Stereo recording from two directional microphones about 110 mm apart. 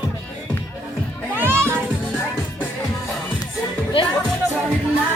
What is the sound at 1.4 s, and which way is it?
Music, 20° right (ahead or behind).